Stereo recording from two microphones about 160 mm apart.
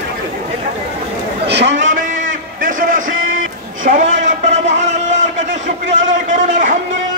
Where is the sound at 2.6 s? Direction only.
55° right (ahead or behind).